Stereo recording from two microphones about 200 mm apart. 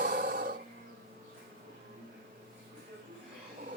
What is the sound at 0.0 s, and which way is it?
Music, 45° right (ahead or behind).